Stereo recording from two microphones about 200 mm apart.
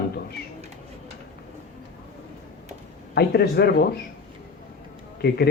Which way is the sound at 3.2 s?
55° left (ahead or behind).